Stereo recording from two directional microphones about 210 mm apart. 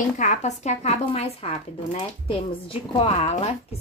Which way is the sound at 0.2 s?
35° left (ahead or behind).